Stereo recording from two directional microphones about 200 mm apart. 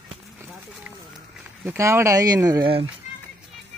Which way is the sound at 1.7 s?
15° right (ahead or behind).